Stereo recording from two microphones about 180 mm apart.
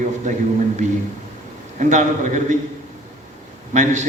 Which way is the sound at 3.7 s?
40° right (ahead or behind).